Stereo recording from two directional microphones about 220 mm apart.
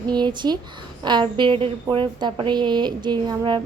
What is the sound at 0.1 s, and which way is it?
A woman's voice, 20° right (ahead or behind).